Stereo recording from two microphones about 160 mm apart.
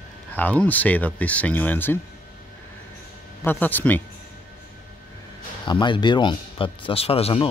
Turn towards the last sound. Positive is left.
turn(degrees=40)  # may be behind; listen again after turning